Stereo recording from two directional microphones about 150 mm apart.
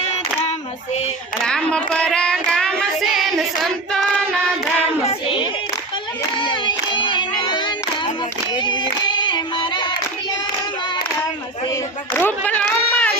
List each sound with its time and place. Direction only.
1.5 s child singing: 5° left (ahead or behind)
6.4 s child singing: 30° left (ahead or behind)
8.5 s music: 30° left (ahead or behind)
12.1 s a sound: 10° left (ahead or behind)